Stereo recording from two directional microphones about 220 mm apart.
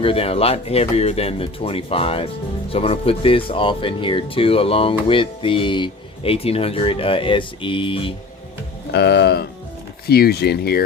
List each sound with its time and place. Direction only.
0.0 s speech: 25° left (ahead or behind)
8.9 s speech: 50° left (ahead or behind)